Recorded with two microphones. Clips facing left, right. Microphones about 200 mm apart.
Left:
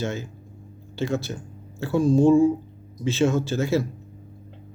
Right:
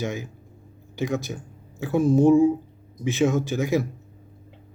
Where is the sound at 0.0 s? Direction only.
15° right (ahead or behind).